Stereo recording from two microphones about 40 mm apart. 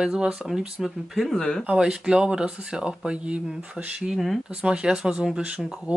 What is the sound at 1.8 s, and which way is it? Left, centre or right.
Speech, centre.